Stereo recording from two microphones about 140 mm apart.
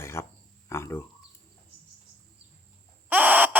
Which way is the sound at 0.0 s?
20° left (ahead or behind).